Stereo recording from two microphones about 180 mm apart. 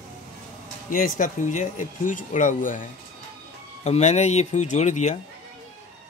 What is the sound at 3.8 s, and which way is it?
Speech, 40° left (ahead or behind).